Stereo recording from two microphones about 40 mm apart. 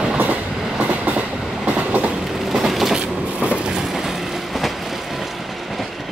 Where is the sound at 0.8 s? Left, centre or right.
Right.